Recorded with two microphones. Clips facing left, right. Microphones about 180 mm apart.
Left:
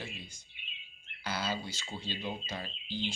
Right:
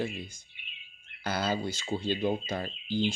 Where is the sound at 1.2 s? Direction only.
50° right (ahead or behind).